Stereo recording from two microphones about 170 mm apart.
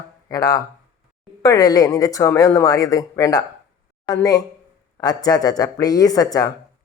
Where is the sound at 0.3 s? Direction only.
20° left (ahead or behind).